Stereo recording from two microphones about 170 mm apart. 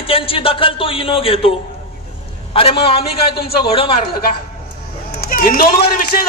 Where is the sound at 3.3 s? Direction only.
65° left (ahead or behind).